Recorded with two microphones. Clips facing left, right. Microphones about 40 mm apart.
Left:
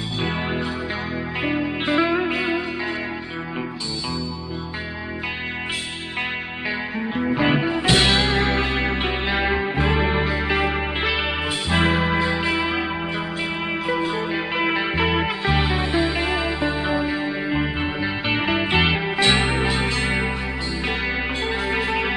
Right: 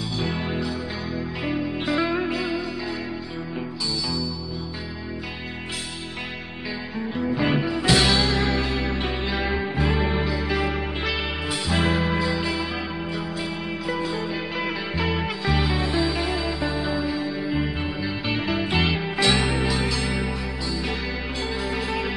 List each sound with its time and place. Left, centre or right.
0.2 s music: left
7.0 s music: left
10.2 s music: left
13.8 s music: left
17.5 s music: left
21.6 s music: left